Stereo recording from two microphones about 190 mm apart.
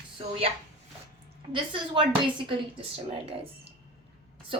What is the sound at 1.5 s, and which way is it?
Speech, 25° right (ahead or behind).